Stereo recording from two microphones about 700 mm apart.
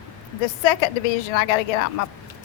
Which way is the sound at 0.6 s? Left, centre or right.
Left.